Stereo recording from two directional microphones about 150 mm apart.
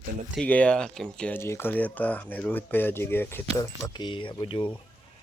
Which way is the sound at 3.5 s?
25° left (ahead or behind).